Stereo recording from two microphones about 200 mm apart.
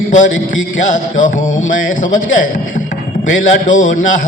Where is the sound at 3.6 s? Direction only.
40° left (ahead or behind).